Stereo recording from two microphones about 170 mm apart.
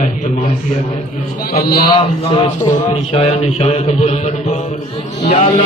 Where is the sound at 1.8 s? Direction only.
30° left (ahead or behind).